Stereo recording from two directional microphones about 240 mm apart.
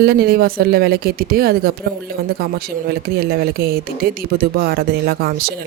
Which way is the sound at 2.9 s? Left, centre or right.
Right.